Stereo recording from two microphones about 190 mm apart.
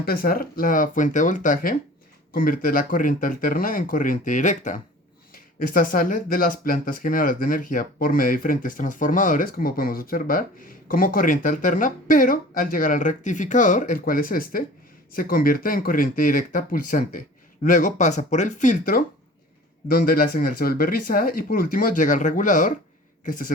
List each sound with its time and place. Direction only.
0.0 s speech: 50° left (ahead or behind)